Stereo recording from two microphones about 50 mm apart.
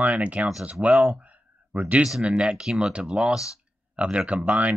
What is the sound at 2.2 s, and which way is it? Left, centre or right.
Speech, right.